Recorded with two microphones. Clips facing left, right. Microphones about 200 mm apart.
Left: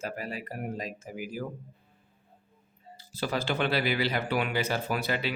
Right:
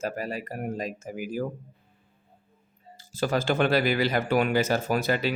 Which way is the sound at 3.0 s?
45° right (ahead or behind).